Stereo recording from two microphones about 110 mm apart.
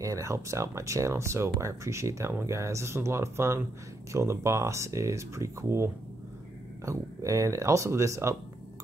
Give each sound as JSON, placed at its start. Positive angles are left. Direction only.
{"t": 0.0, "sound": "speech", "side_deg": -30}